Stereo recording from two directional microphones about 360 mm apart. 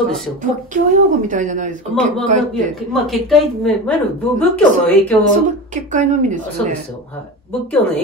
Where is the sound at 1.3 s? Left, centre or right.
Right.